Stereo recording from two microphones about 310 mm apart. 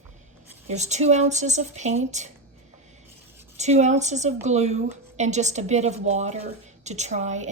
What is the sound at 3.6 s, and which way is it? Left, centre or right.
A woman's voice, right.